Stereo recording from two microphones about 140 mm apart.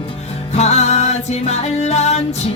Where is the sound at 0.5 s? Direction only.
50° left (ahead or behind).